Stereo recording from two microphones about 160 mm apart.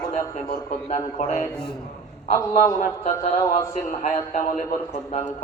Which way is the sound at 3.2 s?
45° left (ahead or behind).